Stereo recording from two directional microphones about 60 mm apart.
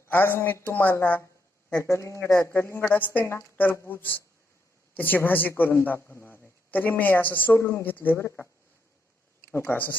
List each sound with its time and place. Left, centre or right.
0.1 s speech: left
1.7 s speech: left
2.8 s speech: left
7.6 s speech: left
7.9 s speech: left
8.1 s speech: left
9.5 s speech: left